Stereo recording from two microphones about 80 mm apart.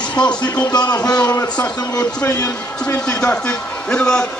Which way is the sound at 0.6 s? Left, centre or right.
Left.